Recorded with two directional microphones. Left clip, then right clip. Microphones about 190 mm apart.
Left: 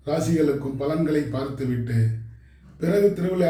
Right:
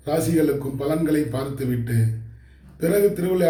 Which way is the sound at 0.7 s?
15° right (ahead or behind).